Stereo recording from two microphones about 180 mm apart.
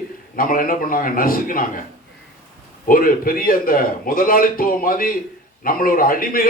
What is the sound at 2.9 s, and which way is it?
A man's voice, 50° left (ahead or behind).